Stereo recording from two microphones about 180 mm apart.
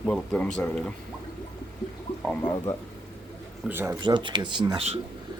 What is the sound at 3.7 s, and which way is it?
Speech, 10° right (ahead or behind).